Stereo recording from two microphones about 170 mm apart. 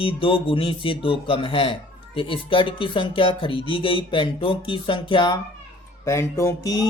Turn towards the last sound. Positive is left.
turn(degrees=20)  # may be behind; listen again after turning